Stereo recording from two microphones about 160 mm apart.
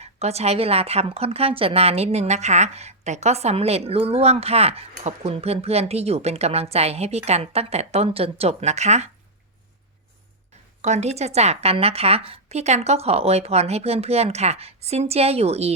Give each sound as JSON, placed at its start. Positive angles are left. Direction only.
{"t": 0.0, "sound": "a woman's voice", "side_deg": -40}
{"t": 10.8, "sound": "a woman's voice", "side_deg": -45}